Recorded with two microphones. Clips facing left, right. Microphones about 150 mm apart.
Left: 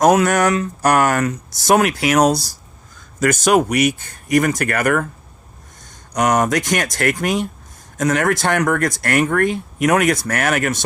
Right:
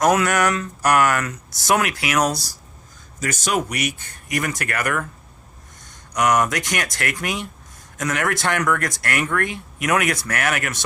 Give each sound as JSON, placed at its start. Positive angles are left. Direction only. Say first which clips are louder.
{"t": 0.0, "sound": "speech", "louder": "left 4 dB", "side_deg": 35}
{"t": 3.2, "sound": "speech", "louder": "left 8 dB", "side_deg": 55}
{"t": 6.1, "sound": "speech", "louder": "left 3 dB", "side_deg": 35}